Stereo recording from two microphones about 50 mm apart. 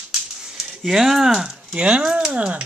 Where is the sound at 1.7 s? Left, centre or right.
Right.